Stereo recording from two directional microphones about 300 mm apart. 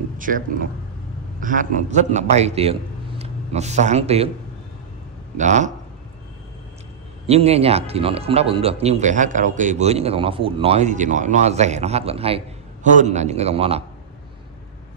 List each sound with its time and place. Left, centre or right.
0.2 s a man's voice: right
5.4 s speech: right
7.2 s speech: right